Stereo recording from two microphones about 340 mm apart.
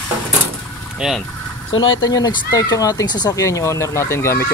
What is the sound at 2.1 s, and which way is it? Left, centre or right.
Speech, centre.